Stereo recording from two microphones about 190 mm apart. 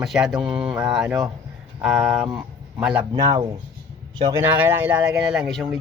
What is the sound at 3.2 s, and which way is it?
Speech, 20° right (ahead or behind).